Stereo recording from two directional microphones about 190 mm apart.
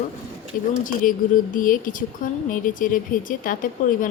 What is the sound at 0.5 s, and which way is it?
Speech, 45° left (ahead or behind).